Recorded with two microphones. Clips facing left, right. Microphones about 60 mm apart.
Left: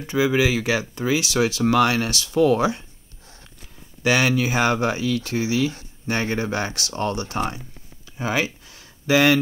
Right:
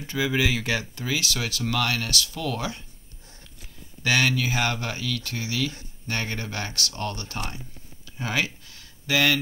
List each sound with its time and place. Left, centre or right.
0.1 s speech: centre
4.0 s speech: centre
8.2 s a sound: centre